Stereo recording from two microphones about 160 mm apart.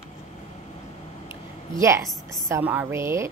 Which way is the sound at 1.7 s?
20° right (ahead or behind).